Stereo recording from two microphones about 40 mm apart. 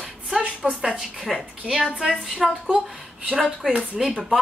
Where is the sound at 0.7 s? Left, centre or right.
Centre.